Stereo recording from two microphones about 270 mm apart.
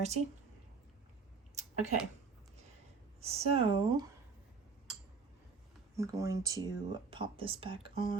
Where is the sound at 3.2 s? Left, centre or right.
Right.